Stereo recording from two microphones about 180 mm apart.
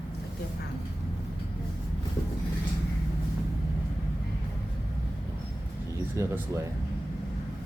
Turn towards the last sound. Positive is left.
turn(degrees=-15)  # may be behind; listen again after turning